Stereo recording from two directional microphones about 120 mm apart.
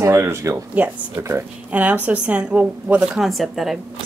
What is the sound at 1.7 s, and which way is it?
Speech, 10° right (ahead or behind).